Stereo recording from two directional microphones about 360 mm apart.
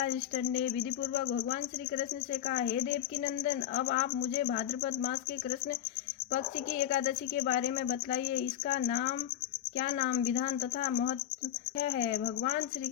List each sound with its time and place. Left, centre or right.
0.0 s speech: left
2.5 s speech: left